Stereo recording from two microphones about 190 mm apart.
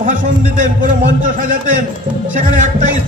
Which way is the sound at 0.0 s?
40° right (ahead or behind).